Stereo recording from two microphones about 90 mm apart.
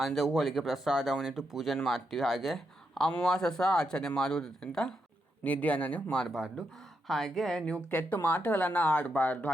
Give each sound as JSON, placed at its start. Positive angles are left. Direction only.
{"t": 0.0, "sound": "speech", "side_deg": 5}
{"t": 6.3, "sound": "speech", "side_deg": -5}
{"t": 7.1, "sound": "speech", "side_deg": 5}
{"t": 7.9, "sound": "speech", "side_deg": 20}